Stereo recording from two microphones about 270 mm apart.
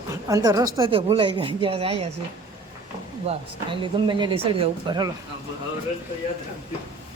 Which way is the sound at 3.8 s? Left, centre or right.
Centre.